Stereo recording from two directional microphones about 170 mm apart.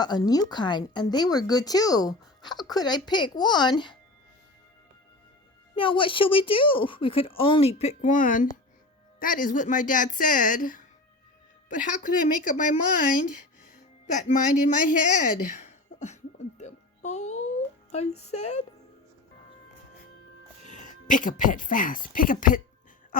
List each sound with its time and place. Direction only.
0.0 s a woman's voice: 25° left (ahead or behind)
5.7 s a woman's voice: 30° left (ahead or behind)
16.6 s music: 40° left (ahead or behind)
18.2 s speech: 40° left (ahead or behind)
20.7 s speech: 45° left (ahead or behind)